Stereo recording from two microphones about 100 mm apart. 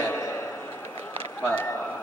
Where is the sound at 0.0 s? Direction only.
25° left (ahead or behind).